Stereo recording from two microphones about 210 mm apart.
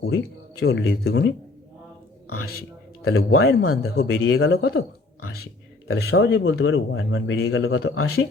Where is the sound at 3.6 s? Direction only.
90° left.